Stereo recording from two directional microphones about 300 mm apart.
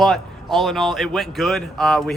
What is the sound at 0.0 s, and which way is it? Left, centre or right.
Speech, centre.